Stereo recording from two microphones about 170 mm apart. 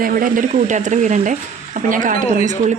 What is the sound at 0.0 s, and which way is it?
Speech, 55° right (ahead or behind).